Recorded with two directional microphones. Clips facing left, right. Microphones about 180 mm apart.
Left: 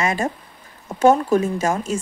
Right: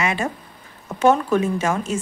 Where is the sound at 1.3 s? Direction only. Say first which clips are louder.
Left 1 dB; 35° left (ahead or behind).